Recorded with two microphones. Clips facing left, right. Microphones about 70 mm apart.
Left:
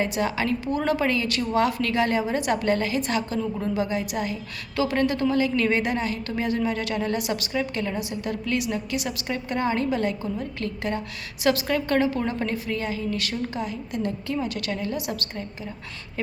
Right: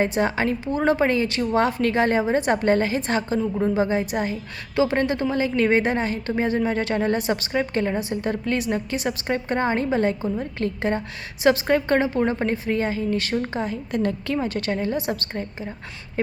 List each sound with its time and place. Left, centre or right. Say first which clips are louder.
0.0 s a woman's voice: right 3 dB; right